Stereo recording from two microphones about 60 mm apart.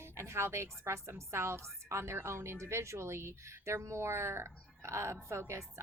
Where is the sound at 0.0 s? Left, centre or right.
Right.